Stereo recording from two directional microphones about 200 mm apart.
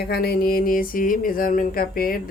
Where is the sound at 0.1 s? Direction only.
50° left (ahead or behind).